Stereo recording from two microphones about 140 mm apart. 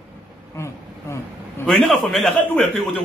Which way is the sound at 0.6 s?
20° left (ahead or behind).